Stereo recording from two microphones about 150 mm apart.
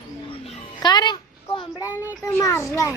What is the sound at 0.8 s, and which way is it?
Speech, 30° left (ahead or behind).